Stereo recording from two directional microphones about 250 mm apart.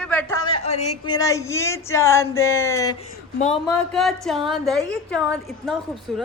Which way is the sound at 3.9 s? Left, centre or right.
Centre.